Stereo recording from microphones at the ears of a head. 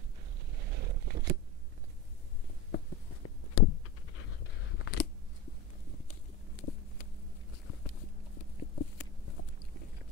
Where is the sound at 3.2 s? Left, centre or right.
Left.